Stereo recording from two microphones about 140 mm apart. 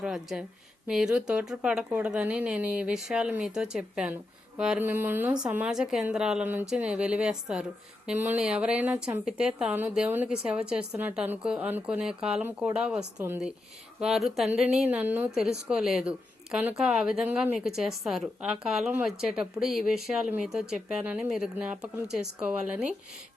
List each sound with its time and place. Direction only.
0.0 s a woman's voice: 5° right (ahead or behind)
14.0 s a woman's voice: 5° right (ahead or behind)